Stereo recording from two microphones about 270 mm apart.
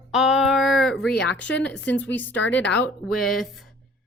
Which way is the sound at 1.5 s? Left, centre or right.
Centre.